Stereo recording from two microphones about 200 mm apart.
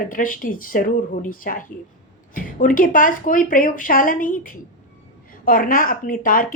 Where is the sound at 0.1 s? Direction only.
45° left (ahead or behind).